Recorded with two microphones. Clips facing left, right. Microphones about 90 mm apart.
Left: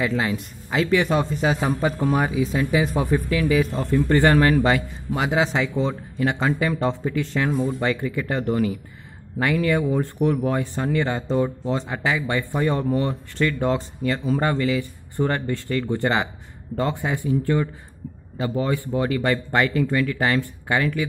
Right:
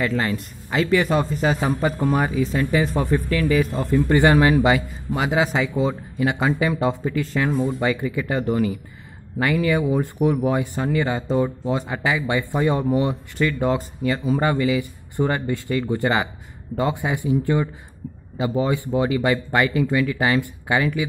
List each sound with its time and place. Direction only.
0.0 s a man's voice: 5° left (ahead or behind)
3.9 s a man's voice: 15° right (ahead or behind)
13.5 s a man's voice: 5° right (ahead or behind)